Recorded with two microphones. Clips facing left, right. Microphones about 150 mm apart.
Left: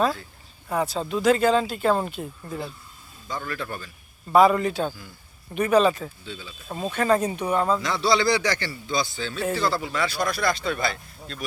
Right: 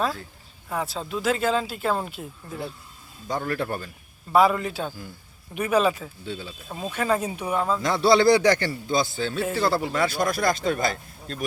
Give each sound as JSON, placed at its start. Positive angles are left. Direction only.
{"t": 0.7, "sound": "speech", "side_deg": 0}
{"t": 3.4, "sound": "speech", "side_deg": -50}
{"t": 4.3, "sound": "speech", "side_deg": 0}
{"t": 6.2, "sound": "speech", "side_deg": -55}
{"t": 6.7, "sound": "speech", "side_deg": 5}
{"t": 7.8, "sound": "speech", "side_deg": -50}